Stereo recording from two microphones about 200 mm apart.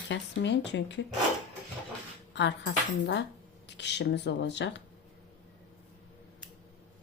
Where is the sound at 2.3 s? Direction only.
60° left (ahead or behind).